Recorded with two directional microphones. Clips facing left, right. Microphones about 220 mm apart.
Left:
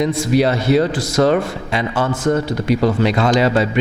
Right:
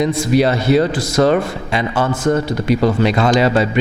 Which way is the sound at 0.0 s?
10° right (ahead or behind).